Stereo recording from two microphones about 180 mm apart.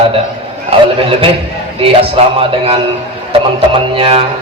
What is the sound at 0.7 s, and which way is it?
Speech, 30° right (ahead or behind).